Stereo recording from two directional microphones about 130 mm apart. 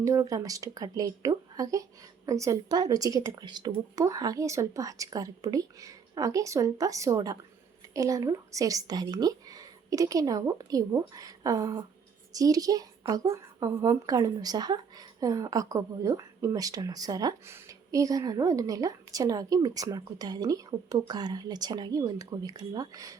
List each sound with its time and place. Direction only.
0.0 s speech: 25° right (ahead or behind)